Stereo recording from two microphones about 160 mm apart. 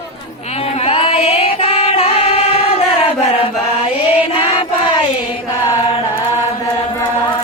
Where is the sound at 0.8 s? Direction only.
35° left (ahead or behind).